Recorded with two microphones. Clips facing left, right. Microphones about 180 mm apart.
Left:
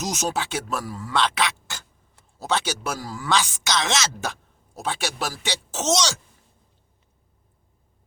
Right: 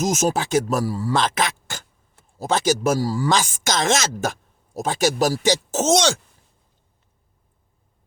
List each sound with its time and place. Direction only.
0.0 s speech: 50° right (ahead or behind)